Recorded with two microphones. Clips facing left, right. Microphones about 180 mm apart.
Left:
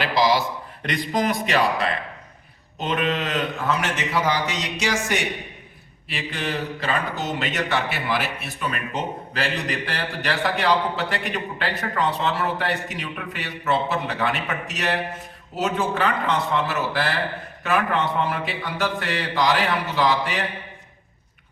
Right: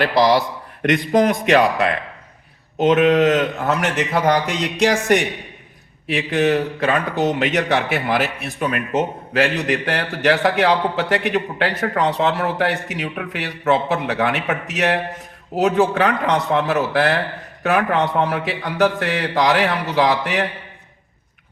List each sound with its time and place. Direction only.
0.0 s a man's voice: 60° right (ahead or behind)
2.7 s a man's voice: 70° right (ahead or behind)
6.4 s a man's voice: 50° right (ahead or behind); by 19.5 s 65° right (ahead or behind)